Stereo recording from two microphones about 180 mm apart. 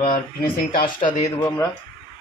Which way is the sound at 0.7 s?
50° left (ahead or behind).